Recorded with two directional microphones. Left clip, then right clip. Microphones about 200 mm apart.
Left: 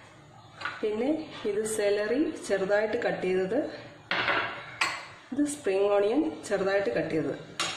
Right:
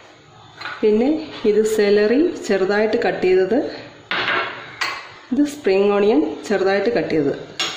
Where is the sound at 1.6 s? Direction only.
35° right (ahead or behind).